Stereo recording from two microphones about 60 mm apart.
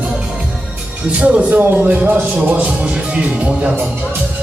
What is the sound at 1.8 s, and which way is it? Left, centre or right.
Speech, right.